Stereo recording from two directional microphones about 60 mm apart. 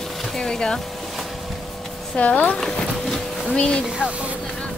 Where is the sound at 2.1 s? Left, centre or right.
Left.